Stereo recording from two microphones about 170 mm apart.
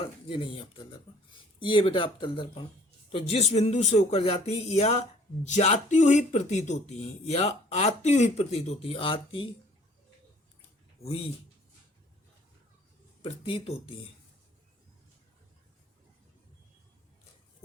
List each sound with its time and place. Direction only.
0.0 s speech: 35° left (ahead or behind)
13.2 s speech: 35° left (ahead or behind)